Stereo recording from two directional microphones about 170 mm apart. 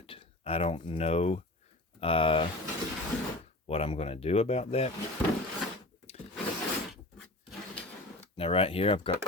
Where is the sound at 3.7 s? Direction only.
35° left (ahead or behind).